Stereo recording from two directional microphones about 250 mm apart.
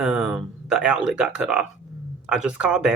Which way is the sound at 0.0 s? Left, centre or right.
Centre.